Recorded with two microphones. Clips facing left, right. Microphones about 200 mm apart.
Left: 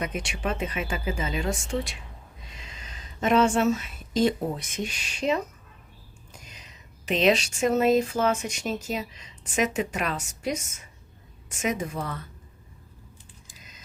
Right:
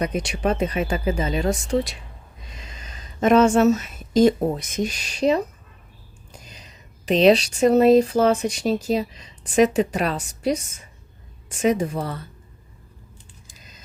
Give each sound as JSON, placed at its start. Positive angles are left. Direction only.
{"t": 0.0, "sound": "speech", "side_deg": -40}